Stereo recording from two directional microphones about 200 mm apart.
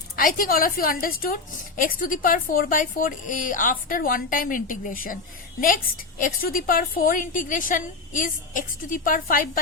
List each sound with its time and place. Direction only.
0.2 s a woman's voice: 45° left (ahead or behind)